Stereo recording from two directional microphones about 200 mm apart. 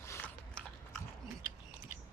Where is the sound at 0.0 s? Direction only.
10° left (ahead or behind).